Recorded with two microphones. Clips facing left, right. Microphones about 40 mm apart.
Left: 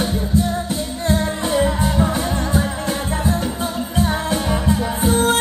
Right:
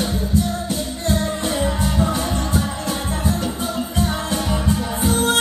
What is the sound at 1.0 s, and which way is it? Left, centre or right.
Music, left.